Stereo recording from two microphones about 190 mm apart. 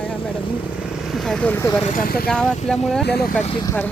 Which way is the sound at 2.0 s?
50° left (ahead or behind).